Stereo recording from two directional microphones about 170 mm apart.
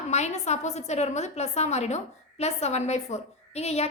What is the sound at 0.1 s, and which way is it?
A woman's voice, 40° left (ahead or behind).